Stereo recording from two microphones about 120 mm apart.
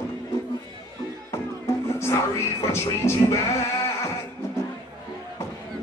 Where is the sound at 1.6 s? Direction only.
25° left (ahead or behind).